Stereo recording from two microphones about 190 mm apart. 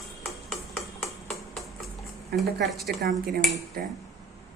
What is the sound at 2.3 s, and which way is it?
Speech, centre (ahead or behind).